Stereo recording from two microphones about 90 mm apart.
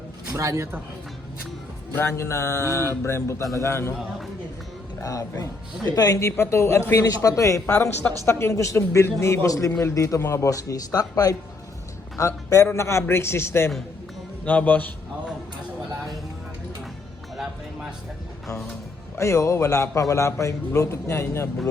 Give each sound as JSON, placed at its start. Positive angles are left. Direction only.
{"t": 0.3, "sound": "a man's voice", "side_deg": -35}
{"t": 2.0, "sound": "a man's voice", "side_deg": 30}
{"t": 4.9, "sound": "a man's voice", "side_deg": 35}
{"t": 7.7, "sound": "a man's voice", "side_deg": 20}
{"t": 8.2, "sound": "a man's voice", "side_deg": 30}
{"t": 14.4, "sound": "a man's voice", "side_deg": 15}
{"t": 17.3, "sound": "music", "side_deg": -5}
{"t": 19.1, "sound": "a man's voice", "side_deg": 30}